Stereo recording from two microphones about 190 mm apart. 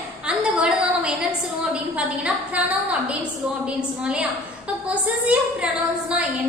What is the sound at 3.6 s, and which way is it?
A woman's voice, 5° right (ahead or behind).